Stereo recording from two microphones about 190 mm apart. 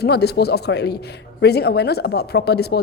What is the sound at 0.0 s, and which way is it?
A woman's voice, 60° left (ahead or behind).